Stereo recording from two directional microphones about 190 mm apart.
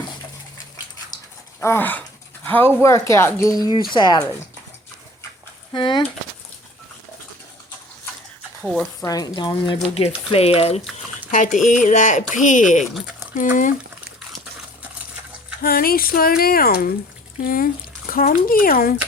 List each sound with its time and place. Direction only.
1.6 s speech: 10° left (ahead or behind)
5.7 s speech: 25° left (ahead or behind)
8.6 s speech: centre (ahead or behind)
9.0 s speech: 20° left (ahead or behind); by 13.7 s 45° left (ahead or behind)
15.6 s speech: 50° left (ahead or behind)